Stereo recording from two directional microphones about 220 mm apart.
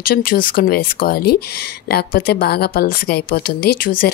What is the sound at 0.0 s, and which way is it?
Speech, 40° left (ahead or behind).